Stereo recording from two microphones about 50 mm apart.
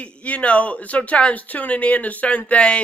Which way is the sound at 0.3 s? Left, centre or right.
Left.